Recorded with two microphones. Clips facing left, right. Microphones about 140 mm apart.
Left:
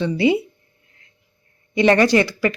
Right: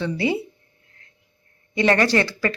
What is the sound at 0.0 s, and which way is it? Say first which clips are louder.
Speech: left 5 dB; 20° left (ahead or behind).